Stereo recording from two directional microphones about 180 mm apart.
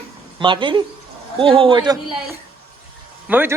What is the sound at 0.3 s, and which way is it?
A man's voice, 25° right (ahead or behind).